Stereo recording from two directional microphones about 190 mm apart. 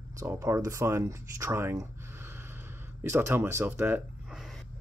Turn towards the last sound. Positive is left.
turn(degrees=0)  # may be behind; listen again after turning